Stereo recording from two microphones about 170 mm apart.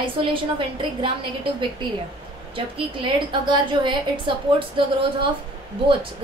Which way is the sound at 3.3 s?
30° right (ahead or behind).